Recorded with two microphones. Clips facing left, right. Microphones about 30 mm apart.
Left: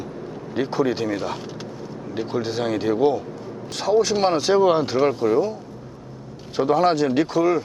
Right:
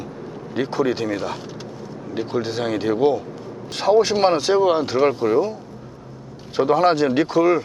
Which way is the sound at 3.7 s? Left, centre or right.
Centre.